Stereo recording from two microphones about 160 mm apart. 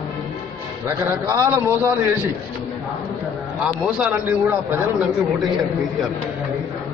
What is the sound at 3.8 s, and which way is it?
Speech, 10° right (ahead or behind).